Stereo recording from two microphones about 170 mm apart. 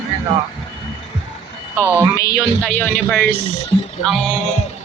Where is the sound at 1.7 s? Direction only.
10° right (ahead or behind).